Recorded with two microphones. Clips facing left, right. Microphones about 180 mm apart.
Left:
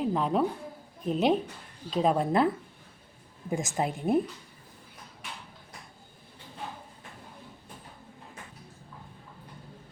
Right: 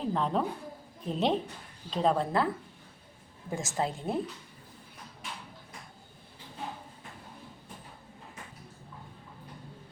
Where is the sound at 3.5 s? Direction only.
15° left (ahead or behind).